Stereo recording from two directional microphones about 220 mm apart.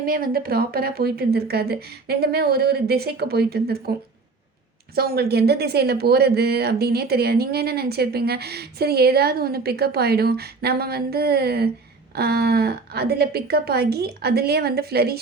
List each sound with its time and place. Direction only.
0.0 s speech: 40° right (ahead or behind)
4.9 s speech: 45° right (ahead or behind)